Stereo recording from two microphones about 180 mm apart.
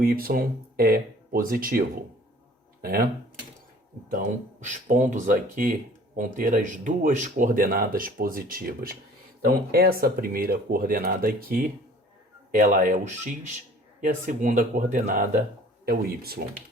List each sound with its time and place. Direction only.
0.0 s speech: 55° right (ahead or behind)
2.8 s speech: 55° right (ahead or behind)
4.6 s speech: 45° right (ahead or behind)
15.9 s speech: 55° right (ahead or behind)